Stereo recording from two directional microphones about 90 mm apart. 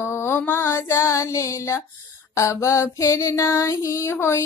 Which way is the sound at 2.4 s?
35° left (ahead or behind).